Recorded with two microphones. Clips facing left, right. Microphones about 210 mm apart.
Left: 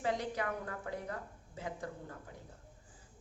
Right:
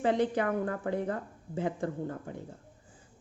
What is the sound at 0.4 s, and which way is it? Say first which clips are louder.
A woman's voice: right 9 dB; 50° right (ahead or behind).